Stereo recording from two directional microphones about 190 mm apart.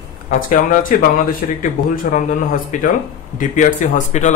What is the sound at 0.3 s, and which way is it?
Speech, 45° left (ahead or behind).